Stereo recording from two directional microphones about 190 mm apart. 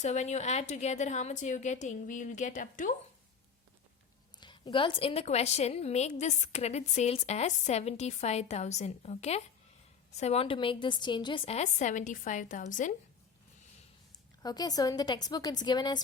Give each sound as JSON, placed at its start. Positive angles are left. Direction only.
{"t": 0.0, "sound": "a woman's voice", "side_deg": 40}
{"t": 4.4, "sound": "a woman's voice", "side_deg": 25}
{"t": 14.4, "sound": "a woman's voice", "side_deg": 20}